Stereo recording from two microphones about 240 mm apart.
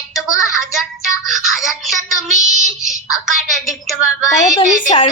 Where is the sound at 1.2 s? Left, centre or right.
Centre.